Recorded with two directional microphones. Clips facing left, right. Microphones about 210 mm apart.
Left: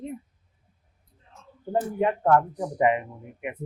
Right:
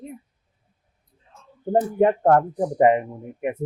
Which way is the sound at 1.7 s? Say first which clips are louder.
Right 6 dB; 45° right (ahead or behind).